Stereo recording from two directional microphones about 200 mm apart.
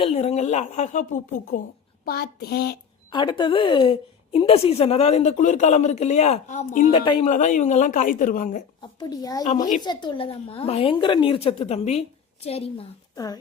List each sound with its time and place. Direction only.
0.0 s a woman's voice: 30° left (ahead or behind)
2.0 s a sound: 50° left (ahead or behind)
3.1 s a woman's voice: 25° left (ahead or behind); by 6.9 s 40° left (ahead or behind)
6.9 s a woman's voice: 25° left (ahead or behind)
7.3 s a woman's voice: 40° left (ahead or behind)
9.0 s a woman's voice: 20° left (ahead or behind)